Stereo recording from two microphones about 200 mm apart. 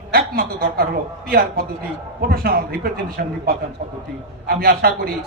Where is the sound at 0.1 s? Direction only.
50° right (ahead or behind).